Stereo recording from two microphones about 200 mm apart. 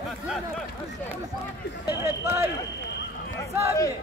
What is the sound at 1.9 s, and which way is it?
Speech, 10° right (ahead or behind).